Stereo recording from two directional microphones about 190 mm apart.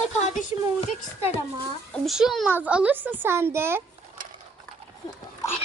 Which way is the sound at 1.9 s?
Centre (ahead or behind).